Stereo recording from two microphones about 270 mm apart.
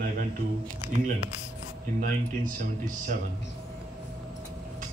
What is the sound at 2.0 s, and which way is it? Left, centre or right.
A man's voice, right.